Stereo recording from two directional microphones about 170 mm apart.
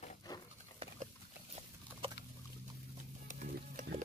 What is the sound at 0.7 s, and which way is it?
Horse, 35° right (ahead or behind).